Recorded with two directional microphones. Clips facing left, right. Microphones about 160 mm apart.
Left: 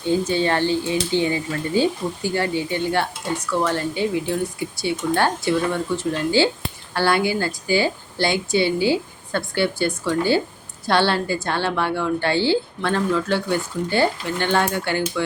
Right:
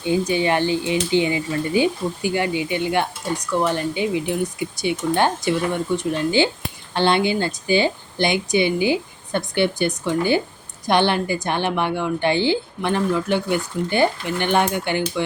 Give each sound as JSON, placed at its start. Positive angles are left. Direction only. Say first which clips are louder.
{"t": 0.0, "sound": "a woman's voice", "louder": "even", "side_deg": -15}